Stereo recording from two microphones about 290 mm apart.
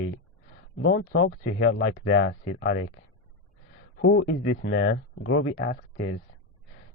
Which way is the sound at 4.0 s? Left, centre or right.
Left.